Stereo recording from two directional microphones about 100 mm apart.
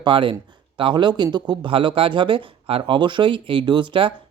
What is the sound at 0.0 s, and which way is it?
Speech, 55° right (ahead or behind).